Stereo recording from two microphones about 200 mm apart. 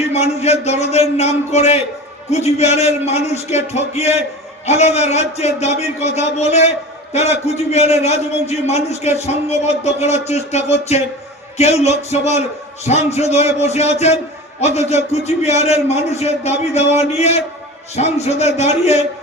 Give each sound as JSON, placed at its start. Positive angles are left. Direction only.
{"t": 0.1, "sound": "a man's voice", "side_deg": 30}